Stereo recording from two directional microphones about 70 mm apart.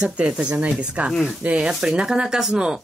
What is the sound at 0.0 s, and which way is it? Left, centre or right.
A woman's voice, centre.